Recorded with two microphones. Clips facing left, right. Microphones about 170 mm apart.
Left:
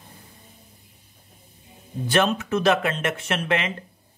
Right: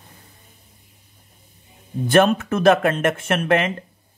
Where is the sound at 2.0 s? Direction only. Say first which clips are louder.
Right 6 dB; 50° right (ahead or behind).